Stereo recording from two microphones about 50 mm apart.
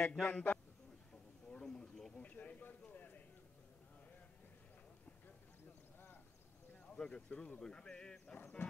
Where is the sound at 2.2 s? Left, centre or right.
Left.